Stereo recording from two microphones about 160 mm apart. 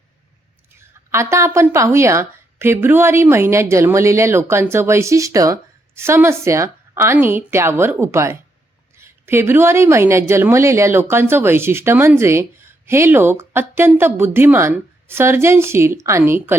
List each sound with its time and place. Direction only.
0.8 s a woman's voice: 15° right (ahead or behind)